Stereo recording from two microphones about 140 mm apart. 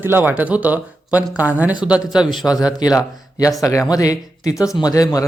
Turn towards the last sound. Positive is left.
turn(degrees=25)  # may be behind; listen again after turning